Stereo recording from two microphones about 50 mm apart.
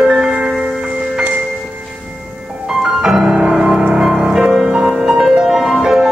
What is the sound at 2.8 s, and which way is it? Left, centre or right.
Music, centre.